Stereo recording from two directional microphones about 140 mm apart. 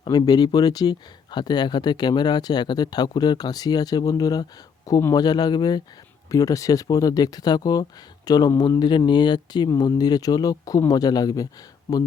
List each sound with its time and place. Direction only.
0.0 s speech: 30° left (ahead or behind)